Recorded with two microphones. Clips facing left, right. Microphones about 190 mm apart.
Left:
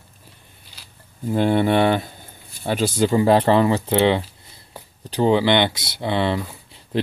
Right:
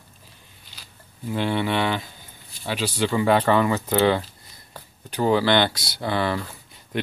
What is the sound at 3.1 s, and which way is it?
Speech, 30° left (ahead or behind).